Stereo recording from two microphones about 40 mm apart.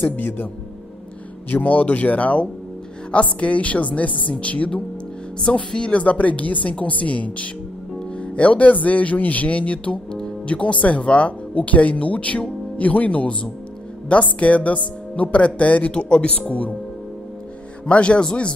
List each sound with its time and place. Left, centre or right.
0.0 s a man's voice: left
1.6 s a woman's voice: left
15.9 s speech: left
17.8 s speech: left